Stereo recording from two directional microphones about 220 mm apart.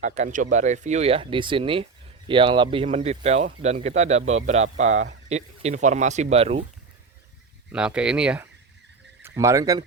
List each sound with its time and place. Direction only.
0.0 s speech: 35° right (ahead or behind)
7.7 s speech: 5° right (ahead or behind)